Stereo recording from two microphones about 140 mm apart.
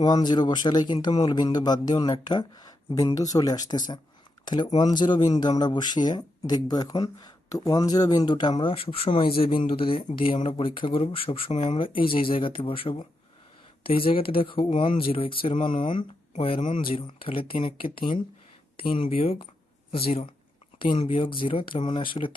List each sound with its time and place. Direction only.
0.0 s speech: 30° left (ahead or behind)